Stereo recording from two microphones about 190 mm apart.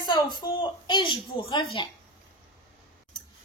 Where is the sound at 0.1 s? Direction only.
20° left (ahead or behind).